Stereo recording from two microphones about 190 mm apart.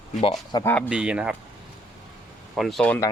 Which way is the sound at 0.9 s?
5° right (ahead or behind).